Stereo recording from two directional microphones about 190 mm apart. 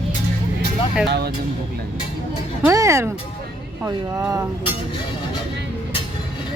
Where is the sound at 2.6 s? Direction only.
15° right (ahead or behind).